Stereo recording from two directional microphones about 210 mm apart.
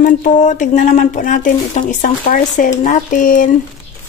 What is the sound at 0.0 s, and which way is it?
Speech, 35° left (ahead or behind).